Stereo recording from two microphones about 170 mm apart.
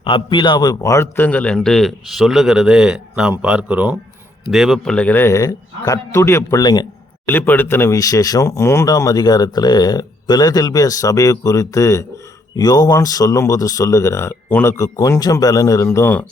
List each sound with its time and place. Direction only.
0.0 s a man's voice: 30° left (ahead or behind)
7.3 s speech: 10° left (ahead or behind)